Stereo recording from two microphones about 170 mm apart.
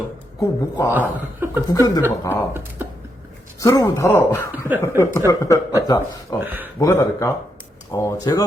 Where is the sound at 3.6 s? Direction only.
20° left (ahead or behind).